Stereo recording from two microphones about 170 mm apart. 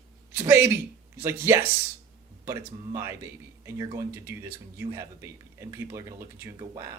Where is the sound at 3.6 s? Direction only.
20° right (ahead or behind).